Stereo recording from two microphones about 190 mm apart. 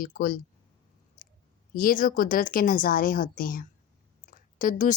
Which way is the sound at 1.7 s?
45° left (ahead or behind).